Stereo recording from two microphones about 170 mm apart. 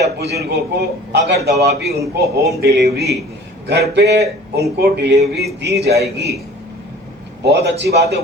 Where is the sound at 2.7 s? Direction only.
70° right (ahead or behind).